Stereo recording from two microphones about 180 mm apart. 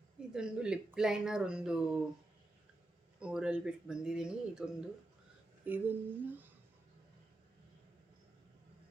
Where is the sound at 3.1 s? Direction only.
5° right (ahead or behind).